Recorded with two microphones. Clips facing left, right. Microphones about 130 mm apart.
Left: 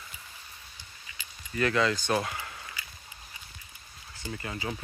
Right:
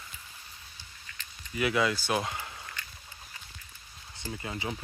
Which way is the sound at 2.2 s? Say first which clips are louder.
Even; 20° right (ahead or behind).